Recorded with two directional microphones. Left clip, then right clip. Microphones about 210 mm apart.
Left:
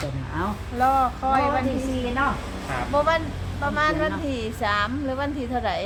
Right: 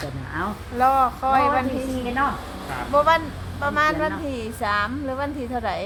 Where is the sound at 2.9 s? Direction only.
25° right (ahead or behind).